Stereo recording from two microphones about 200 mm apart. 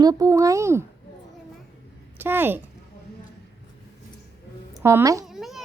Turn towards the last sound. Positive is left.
turn(degrees=0)  # may be behind; listen again after turning